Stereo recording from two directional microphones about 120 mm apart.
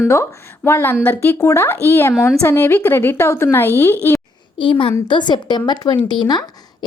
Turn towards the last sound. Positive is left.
turn(degrees=35)  # may be behind; listen again after turning